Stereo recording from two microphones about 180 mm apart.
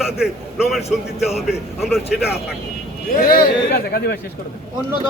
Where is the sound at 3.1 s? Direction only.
55° left (ahead or behind).